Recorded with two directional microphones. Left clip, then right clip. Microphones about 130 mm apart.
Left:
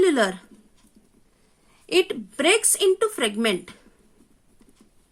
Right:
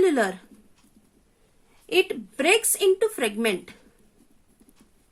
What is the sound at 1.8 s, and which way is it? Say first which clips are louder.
Speech: left 1 dB; 55° left (ahead or behind).